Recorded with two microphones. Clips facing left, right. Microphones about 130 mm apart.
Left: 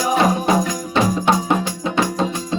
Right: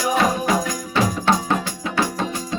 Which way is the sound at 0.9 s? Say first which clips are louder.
Left 2 dB; 20° left (ahead or behind).